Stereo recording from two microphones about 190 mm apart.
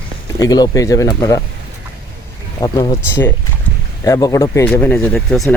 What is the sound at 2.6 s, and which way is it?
Speech, 20° left (ahead or behind).